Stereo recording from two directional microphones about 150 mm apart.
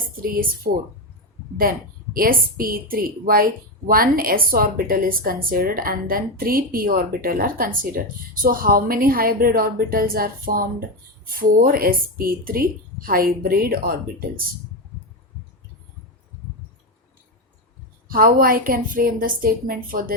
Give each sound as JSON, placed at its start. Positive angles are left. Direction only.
{"t": 0.2, "sound": "a woman's voice", "side_deg": -75}
{"t": 2.1, "sound": "a woman's voice", "side_deg": -75}
{"t": 18.1, "sound": "a woman's voice", "side_deg": -75}